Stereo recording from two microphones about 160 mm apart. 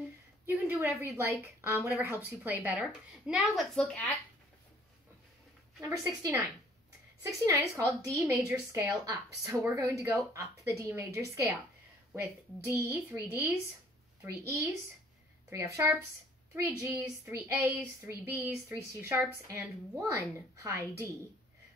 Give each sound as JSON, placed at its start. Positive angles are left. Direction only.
{"t": 0.5, "sound": "a woman's voice", "side_deg": -15}
{"t": 5.8, "sound": "a woman's voice", "side_deg": -15}
{"t": 12.6, "sound": "a woman's voice", "side_deg": -20}